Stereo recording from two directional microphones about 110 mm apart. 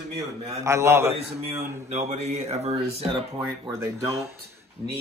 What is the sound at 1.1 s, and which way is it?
Speech, 75° right (ahead or behind).